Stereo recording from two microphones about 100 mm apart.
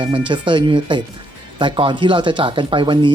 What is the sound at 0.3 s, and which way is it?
Speech, 50° right (ahead or behind).